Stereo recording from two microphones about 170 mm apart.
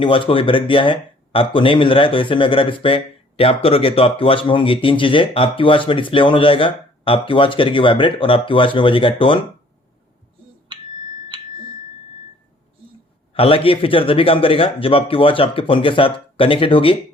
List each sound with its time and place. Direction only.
0.0 s speech: 30° left (ahead or behind)
13.3 s speech: 35° left (ahead or behind)